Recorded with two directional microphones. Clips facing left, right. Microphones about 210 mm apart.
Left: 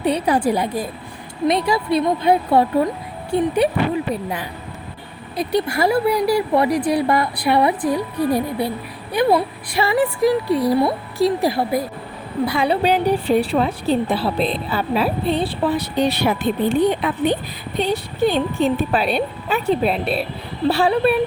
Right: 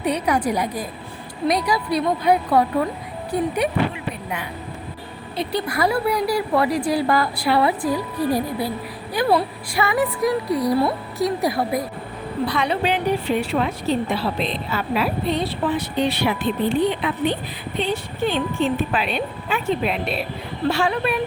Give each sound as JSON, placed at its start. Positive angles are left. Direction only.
{"t": 0.0, "sound": "speech", "side_deg": 30}
{"t": 5.5, "sound": "speech", "side_deg": 25}